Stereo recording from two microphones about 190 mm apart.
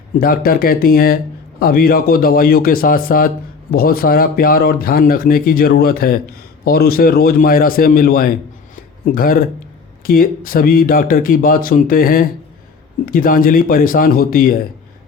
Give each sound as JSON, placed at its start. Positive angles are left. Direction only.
{"t": 0.2, "sound": "a man's voice", "side_deg": 50}